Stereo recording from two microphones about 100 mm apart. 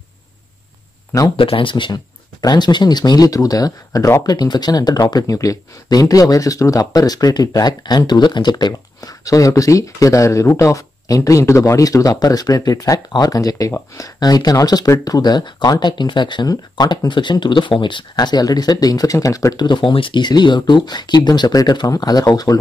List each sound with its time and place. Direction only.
1.3 s speech: 60° left (ahead or behind); by 22.6 s 40° left (ahead or behind)